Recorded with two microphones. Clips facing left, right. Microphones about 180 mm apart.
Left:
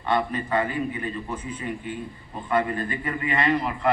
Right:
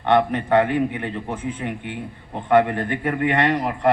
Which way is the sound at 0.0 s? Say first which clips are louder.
Right 6 dB; 75° right (ahead or behind).